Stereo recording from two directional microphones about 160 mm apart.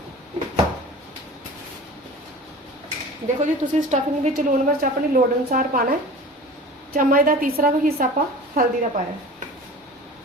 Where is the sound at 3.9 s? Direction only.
50° right (ahead or behind).